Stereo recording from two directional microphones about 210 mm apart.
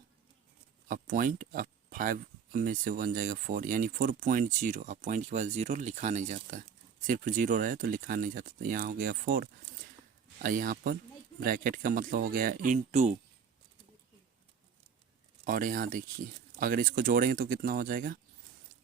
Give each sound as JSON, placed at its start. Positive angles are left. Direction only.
{"t": 0.9, "sound": "speech", "side_deg": -40}
{"t": 15.4, "sound": "speech", "side_deg": -40}